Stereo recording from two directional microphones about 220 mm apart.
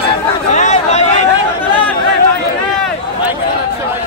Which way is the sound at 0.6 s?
30° left (ahead or behind).